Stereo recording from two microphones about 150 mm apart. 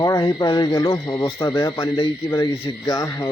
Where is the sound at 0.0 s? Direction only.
25° left (ahead or behind).